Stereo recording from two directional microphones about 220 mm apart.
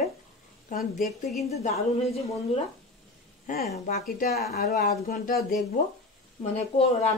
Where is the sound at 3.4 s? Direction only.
45° left (ahead or behind).